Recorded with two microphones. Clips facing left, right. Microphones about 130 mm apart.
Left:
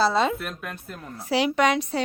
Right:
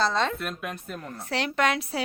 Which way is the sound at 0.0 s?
10° left (ahead or behind).